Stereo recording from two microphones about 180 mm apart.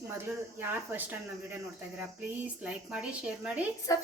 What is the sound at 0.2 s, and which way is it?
Speech, 10° right (ahead or behind).